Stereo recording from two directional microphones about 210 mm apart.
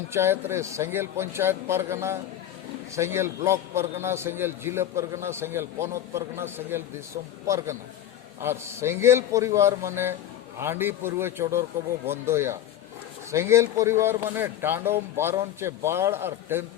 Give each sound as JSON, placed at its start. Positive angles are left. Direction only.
{"t": 0.1, "sound": "a man's voice", "side_deg": -10}